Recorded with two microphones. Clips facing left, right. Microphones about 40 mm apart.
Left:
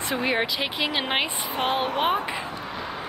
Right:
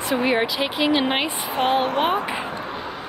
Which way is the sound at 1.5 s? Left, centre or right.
Right.